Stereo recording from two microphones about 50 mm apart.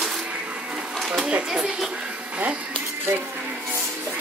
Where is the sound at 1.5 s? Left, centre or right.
Centre.